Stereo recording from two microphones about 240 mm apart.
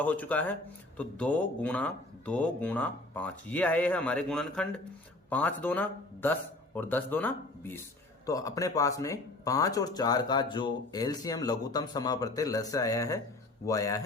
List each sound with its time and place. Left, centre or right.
0.0 s speech: centre